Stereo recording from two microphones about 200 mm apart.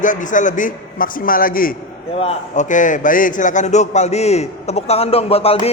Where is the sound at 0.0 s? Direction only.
40° left (ahead or behind).